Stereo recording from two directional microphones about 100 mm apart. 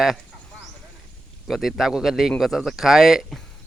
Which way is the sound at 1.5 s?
5° right (ahead or behind).